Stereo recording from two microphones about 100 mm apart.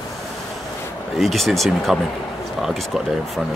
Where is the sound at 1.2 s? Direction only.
Centre (ahead or behind).